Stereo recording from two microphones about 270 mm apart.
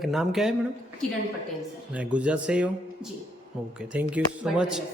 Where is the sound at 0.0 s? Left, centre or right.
Centre.